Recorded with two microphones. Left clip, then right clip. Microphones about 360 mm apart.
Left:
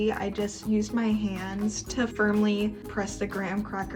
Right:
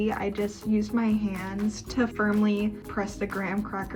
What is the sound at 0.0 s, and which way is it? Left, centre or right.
Speech, centre.